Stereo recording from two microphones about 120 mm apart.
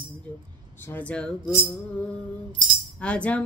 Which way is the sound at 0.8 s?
15° left (ahead or behind).